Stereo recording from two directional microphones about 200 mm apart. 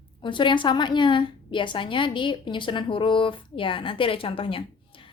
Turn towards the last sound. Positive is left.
turn(degrees=25)  # may be behind; listen again after turning